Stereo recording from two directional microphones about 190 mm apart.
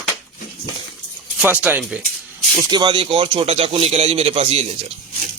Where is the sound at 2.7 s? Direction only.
25° right (ahead or behind).